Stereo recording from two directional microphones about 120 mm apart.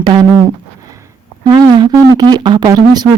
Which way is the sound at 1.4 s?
35° right (ahead or behind).